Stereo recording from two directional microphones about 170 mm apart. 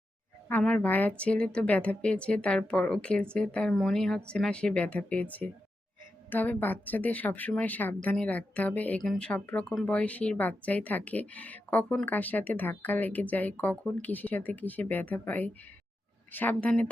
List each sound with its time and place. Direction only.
0.4 s a woman's voice: 10° left (ahead or behind)